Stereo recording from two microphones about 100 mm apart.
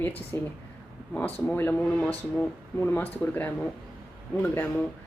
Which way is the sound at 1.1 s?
15° left (ahead or behind).